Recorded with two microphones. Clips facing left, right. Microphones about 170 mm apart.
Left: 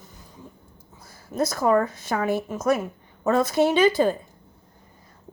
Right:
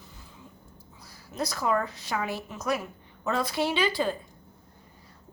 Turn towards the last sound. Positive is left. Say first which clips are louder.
# left 8 dB
turn(degrees=45)  # may be behind; listen again after turning